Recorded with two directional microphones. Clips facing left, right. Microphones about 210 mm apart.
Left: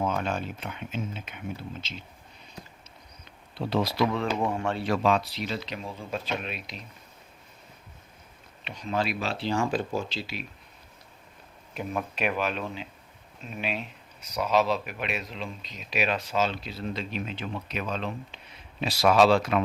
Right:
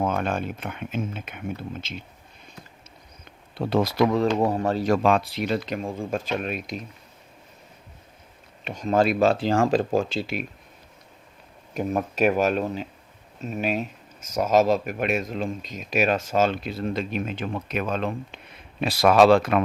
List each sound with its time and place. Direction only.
0.0 s speech: 55° right (ahead or behind)
3.6 s speech: 50° right (ahead or behind)
8.6 s speech: 45° right (ahead or behind)
9.5 s speech: 90° right
10.2 s speech: 55° right (ahead or behind)
11.7 s speech: 45° right (ahead or behind)